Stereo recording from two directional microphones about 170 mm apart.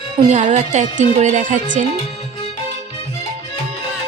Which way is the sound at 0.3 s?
45° right (ahead or behind).